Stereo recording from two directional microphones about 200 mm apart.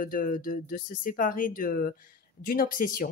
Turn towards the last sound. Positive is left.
turn(degrees=45)  # may be behind; listen again after turning